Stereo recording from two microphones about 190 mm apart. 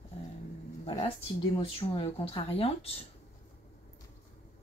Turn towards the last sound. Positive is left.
turn(degrees=30)  # may be behind; listen again after turning